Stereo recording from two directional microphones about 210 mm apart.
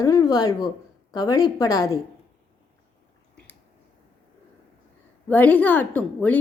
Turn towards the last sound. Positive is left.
turn(degrees=5)  # may be behind; listen again after turning